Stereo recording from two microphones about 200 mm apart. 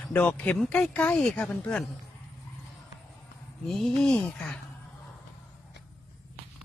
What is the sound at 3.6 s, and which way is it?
Speech, centre (ahead or behind).